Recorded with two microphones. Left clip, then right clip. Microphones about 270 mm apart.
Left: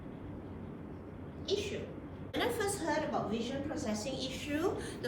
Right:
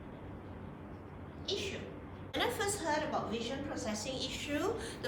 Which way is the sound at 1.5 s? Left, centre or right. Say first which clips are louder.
Left 3 dB; centre.